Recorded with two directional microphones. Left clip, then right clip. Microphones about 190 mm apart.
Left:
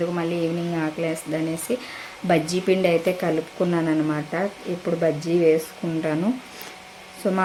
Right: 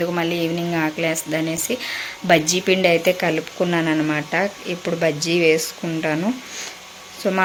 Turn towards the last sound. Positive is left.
turn(degrees=0)  # may be behind; listen again after turning